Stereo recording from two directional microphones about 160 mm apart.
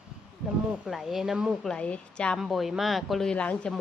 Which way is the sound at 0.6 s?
5° right (ahead or behind).